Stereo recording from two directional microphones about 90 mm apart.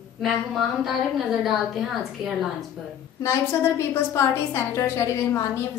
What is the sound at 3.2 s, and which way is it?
A woman's voice, 30° left (ahead or behind).